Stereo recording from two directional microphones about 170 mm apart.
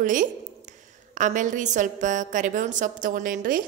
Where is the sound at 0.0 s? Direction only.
50° right (ahead or behind).